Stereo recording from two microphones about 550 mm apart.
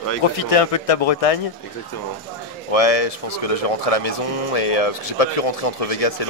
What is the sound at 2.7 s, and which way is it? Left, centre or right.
Speech, left.